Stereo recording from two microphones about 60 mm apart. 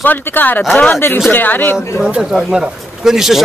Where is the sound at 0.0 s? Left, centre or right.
Left.